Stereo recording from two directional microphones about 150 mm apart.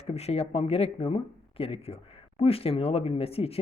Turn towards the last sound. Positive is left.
turn(degrees=40)  # may be behind; listen again after turning